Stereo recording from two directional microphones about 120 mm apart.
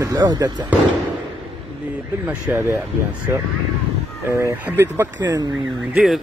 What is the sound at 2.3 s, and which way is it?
Speech, 20° right (ahead or behind).